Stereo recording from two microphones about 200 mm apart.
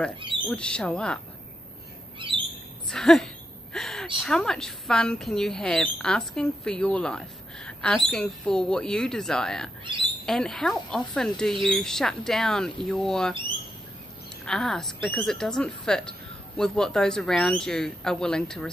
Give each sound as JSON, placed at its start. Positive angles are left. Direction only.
{"t": 0.5, "sound": "speech", "side_deg": 5}
{"t": 2.1, "sound": "bird", "side_deg": -25}
{"t": 2.9, "sound": "speech", "side_deg": 0}
{"t": 3.7, "sound": "gasp", "side_deg": 0}
{"t": 4.2, "sound": "speech", "side_deg": 0}
{"t": 14.4, "sound": "speech", "side_deg": 0}